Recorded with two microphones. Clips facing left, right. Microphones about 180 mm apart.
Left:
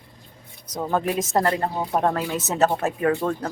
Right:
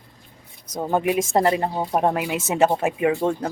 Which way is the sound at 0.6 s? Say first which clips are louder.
Right 1 dB; 25° right (ahead or behind).